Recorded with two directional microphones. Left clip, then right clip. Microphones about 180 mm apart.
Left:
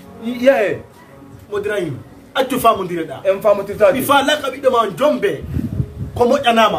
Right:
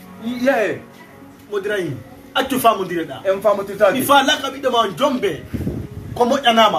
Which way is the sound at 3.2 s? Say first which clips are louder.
Left 3 dB; 20° left (ahead or behind).